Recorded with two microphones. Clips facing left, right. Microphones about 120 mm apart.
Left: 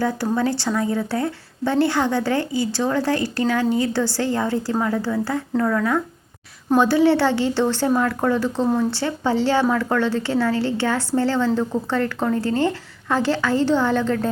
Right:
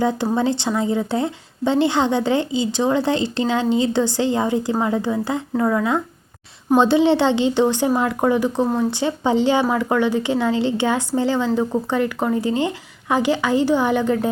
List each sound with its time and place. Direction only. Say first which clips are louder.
0.0 s speech: right 2 dB; 20° right (ahead or behind)